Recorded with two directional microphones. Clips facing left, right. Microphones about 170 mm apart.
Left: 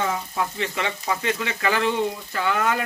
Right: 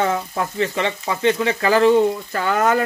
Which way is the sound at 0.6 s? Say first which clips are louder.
Right 6 dB; 35° right (ahead or behind).